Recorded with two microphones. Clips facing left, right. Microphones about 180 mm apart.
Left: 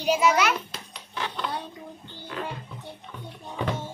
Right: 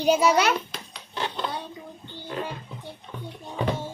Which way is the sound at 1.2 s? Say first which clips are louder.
Right 2 dB; 30° right (ahead or behind).